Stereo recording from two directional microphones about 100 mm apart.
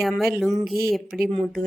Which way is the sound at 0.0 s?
Centre (ahead or behind).